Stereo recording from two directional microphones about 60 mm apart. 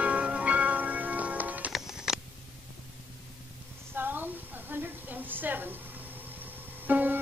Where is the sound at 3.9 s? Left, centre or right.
Right.